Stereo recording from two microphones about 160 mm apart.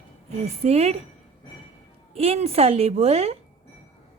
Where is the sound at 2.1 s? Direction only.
40° right (ahead or behind).